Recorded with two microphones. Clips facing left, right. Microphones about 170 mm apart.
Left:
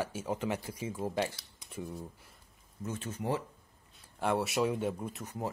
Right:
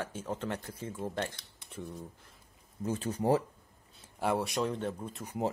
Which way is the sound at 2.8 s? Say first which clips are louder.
Right 6 dB; 35° right (ahead or behind).